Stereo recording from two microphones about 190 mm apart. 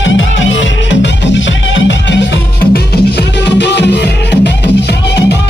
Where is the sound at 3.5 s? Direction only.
65° left (ahead or behind).